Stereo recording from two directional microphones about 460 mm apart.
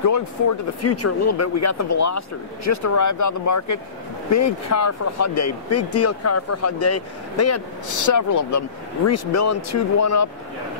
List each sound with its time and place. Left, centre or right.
0.0 s speech: left